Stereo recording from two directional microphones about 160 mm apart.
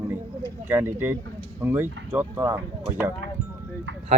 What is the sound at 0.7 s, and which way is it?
Speech, 10° right (ahead or behind).